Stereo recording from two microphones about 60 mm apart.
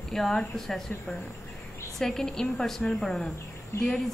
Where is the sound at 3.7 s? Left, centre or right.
Left.